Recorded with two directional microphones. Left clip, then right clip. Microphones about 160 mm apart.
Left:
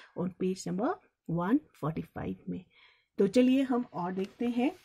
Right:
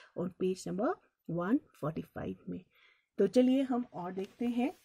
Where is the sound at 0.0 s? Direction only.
30° right (ahead or behind).